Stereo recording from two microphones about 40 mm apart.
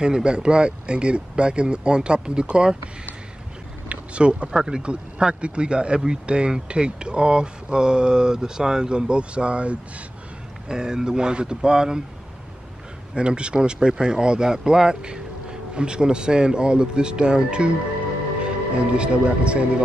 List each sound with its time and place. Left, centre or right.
0.0 s speech: right
3.9 s speech: right
10.7 s speech: centre
13.1 s speech: right